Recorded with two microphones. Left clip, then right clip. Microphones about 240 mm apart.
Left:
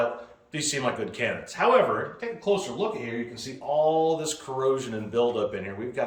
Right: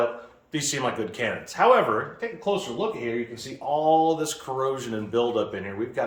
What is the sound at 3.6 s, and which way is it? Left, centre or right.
Speech, centre.